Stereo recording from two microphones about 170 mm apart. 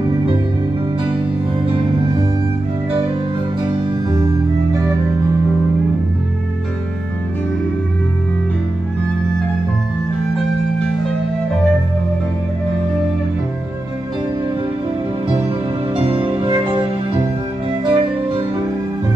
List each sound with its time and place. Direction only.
3.6 s music: 30° right (ahead or behind)
16.0 s music: 30° right (ahead or behind)
17.8 s music: 30° right (ahead or behind)